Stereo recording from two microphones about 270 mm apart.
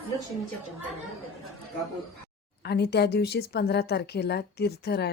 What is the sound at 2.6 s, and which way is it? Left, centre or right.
A woman's voice, left.